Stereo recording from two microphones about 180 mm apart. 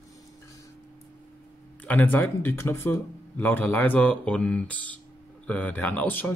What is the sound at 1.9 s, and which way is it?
Speech, 10° left (ahead or behind).